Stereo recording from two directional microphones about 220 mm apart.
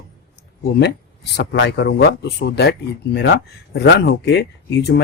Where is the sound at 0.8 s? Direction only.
50° left (ahead or behind).